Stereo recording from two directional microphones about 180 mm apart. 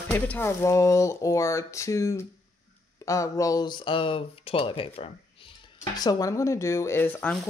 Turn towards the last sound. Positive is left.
turn(degrees=10)  # may be behind; listen again after turning